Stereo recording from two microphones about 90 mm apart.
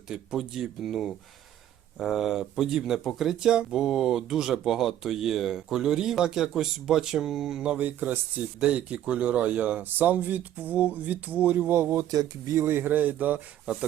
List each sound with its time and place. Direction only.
0.1 s speech: 5° right (ahead or behind); by 11.9 s 25° right (ahead or behind)
11.9 s speech: 40° right (ahead or behind)
12.5 s speech: 25° right (ahead or behind)